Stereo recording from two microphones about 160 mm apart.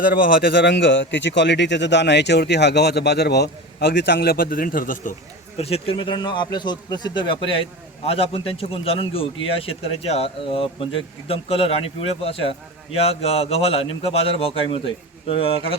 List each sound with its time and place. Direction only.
0.0 s a man's voice: 70° left (ahead or behind)
5.5 s a man's voice: 40° left (ahead or behind)